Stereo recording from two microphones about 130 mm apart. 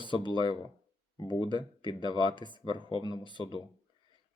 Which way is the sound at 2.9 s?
35° left (ahead or behind).